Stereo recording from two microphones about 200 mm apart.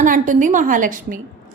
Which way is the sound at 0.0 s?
40° right (ahead or behind).